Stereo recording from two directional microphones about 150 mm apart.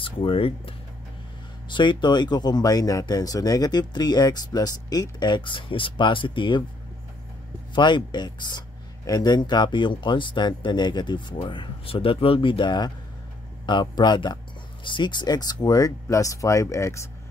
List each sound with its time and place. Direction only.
0.0 s speech: 35° left (ahead or behind)
7.7 s speech: 30° left (ahead or behind)